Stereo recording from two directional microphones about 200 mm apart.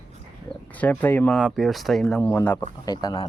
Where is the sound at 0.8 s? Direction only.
10° left (ahead or behind).